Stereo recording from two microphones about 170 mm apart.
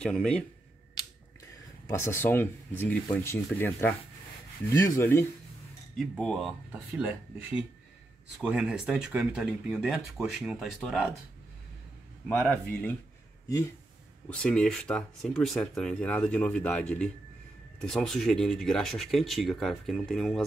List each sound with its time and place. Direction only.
0.0 s speech: 5° left (ahead or behind)
1.9 s speech: 15° left (ahead or behind)
5.9 s speech: centre (ahead or behind)
12.3 s speech: 10° left (ahead or behind)
14.3 s speech: 5° left (ahead or behind)